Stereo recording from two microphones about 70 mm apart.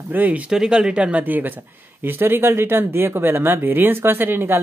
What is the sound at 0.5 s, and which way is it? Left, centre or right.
Speech, centre.